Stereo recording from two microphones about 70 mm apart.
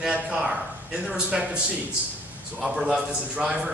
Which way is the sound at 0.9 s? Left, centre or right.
Centre.